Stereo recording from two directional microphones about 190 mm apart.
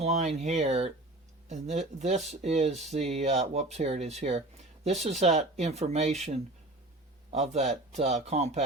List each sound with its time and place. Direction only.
0.0 s speech: 35° right (ahead or behind)
7.3 s speech: 35° right (ahead or behind)